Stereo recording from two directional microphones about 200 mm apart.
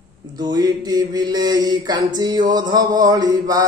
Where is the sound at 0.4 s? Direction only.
20° right (ahead or behind).